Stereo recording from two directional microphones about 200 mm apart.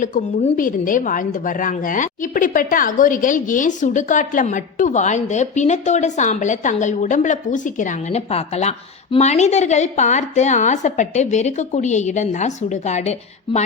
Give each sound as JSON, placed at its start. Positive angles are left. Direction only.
{"t": 0.0, "sound": "a woman's voice", "side_deg": 40}